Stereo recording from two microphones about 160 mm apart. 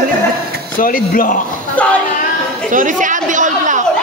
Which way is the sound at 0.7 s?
60° left (ahead or behind).